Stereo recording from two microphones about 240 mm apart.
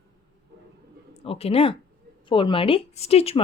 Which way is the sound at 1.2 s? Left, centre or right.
Left.